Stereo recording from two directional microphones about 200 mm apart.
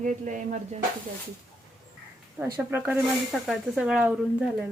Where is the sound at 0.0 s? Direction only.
40° right (ahead or behind).